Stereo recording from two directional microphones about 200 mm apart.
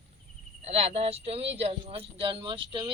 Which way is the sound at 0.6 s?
30° right (ahead or behind).